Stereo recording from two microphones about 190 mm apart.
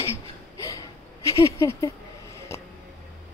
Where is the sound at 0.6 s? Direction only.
15° left (ahead or behind).